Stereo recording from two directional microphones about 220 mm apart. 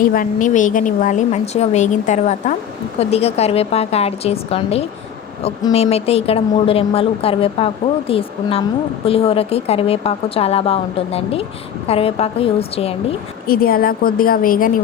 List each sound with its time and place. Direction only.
0.0 s a woman's voice: 40° left (ahead or behind)
13.5 s a woman's voice: 40° left (ahead or behind)